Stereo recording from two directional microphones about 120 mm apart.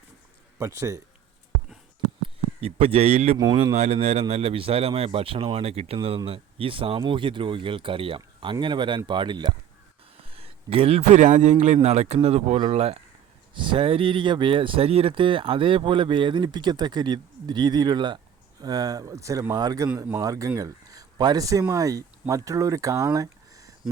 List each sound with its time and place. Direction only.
0.6 s speech: 25° right (ahead or behind)
2.2 s speech: 55° right (ahead or behind)
3.3 s speech: 30° right (ahead or behind)
3.8 s speech: 65° right (ahead or behind); by 9.5 s 40° right (ahead or behind)
10.2 s a man's voice: 55° right (ahead or behind)
13.5 s speech: 45° right (ahead or behind)